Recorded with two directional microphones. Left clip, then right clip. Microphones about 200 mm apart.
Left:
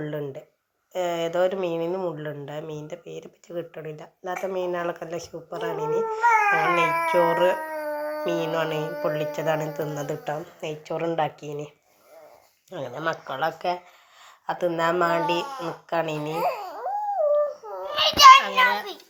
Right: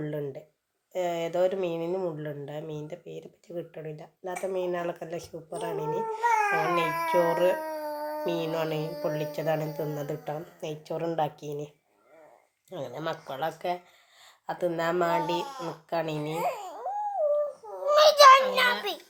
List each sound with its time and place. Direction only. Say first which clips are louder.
0.0 s speech: left 3 dB; centre (ahead or behind)
12.7 s speech: left 5 dB; centre (ahead or behind)
16.4 s dog: left 6 dB; 15° left (ahead or behind)
17.9 s child singing: left 3 dB; 55° right (ahead or behind)